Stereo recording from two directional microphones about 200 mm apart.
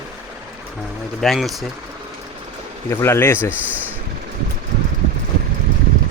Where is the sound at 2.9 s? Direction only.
15° left (ahead or behind).